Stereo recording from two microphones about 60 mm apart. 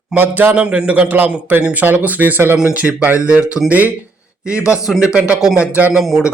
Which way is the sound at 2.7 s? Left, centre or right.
Right.